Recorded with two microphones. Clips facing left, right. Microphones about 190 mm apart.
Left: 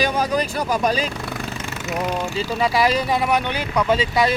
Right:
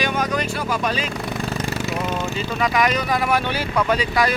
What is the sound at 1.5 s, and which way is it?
Vehicle, 35° right (ahead or behind).